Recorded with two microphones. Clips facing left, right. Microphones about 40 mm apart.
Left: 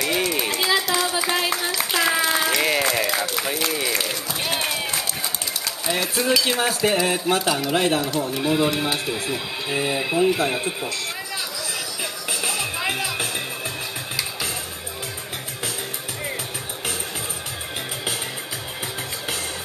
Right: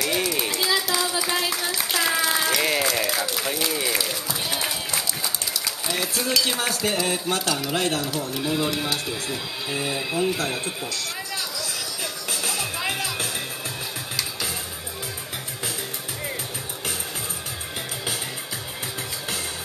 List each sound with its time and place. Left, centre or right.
0.0 s a sound: centre
0.9 s clapping: centre
1.9 s applause: centre
4.5 s music: left
6.1 s speech: centre
12.0 s music: centre